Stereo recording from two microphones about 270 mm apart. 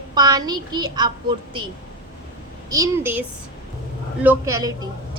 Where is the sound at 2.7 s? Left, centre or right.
Centre.